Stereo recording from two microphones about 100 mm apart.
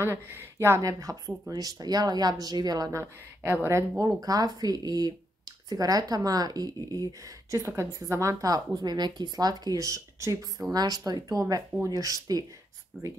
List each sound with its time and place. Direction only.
0.0 s speech: 25° right (ahead or behind); by 3.0 s 40° right (ahead or behind)
3.0 s speech: 25° right (ahead or behind)
4.2 s speech: 40° right (ahead or behind)